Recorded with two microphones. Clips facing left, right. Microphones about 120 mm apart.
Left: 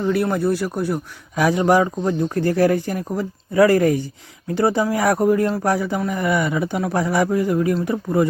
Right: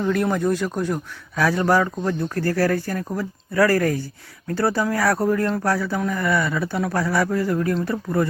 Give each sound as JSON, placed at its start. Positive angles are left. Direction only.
{"t": 0.0, "sound": "a man's voice", "side_deg": 5}